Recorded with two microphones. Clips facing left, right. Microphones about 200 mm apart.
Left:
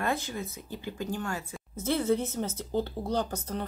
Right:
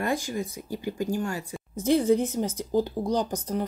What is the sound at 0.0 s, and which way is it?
Speech, 15° right (ahead or behind).